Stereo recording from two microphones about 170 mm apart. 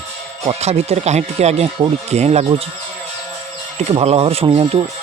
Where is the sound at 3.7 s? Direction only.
40° right (ahead or behind).